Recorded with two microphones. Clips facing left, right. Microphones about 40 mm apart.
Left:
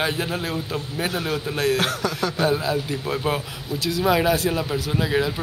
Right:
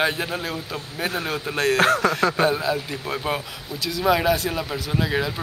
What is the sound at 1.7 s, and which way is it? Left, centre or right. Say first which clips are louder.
Speech: right 5 dB; right.